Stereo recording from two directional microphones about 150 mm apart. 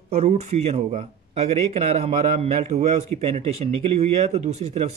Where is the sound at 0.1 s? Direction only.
45° right (ahead or behind).